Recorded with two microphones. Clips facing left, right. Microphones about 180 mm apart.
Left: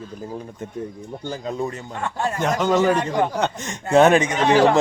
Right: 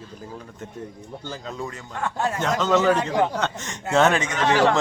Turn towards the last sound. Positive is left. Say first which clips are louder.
# left 3 dB
turn(degrees=15)  # may be behind; listen again after turning